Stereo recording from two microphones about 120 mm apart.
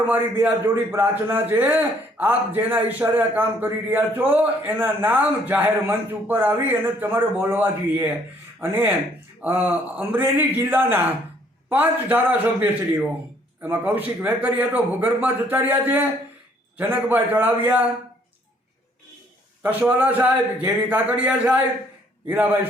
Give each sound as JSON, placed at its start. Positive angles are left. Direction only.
{"t": 0.0, "sound": "a man's voice", "side_deg": -15}
{"t": 19.6, "sound": "a man's voice", "side_deg": -15}